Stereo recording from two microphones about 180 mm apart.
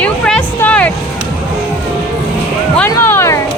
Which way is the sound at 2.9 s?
15° left (ahead or behind).